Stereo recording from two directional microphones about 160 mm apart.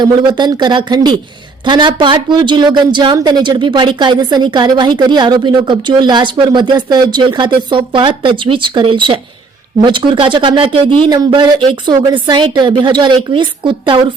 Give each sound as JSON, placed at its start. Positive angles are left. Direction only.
{"t": 0.0, "sound": "speech", "side_deg": -30}